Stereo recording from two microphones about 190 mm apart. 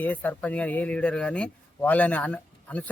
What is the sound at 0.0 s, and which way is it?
Speech, 10° left (ahead or behind).